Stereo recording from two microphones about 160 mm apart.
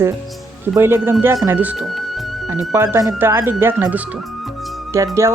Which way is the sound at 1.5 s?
10° right (ahead or behind).